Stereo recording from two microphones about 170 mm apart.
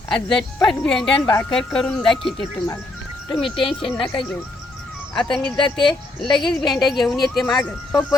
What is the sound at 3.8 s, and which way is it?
Speech, 30° left (ahead or behind).